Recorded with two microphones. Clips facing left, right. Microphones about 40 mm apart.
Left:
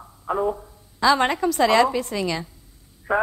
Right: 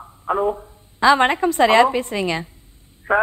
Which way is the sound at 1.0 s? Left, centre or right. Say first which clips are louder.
Right 4 dB; right.